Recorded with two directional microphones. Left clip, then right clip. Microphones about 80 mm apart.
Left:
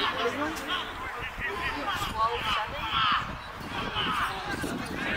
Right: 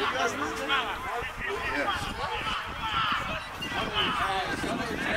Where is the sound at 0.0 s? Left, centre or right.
Centre.